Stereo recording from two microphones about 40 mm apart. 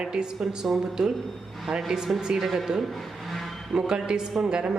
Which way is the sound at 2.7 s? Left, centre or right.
Centre.